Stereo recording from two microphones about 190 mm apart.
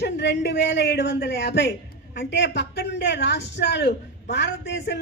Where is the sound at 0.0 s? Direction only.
65° left (ahead or behind).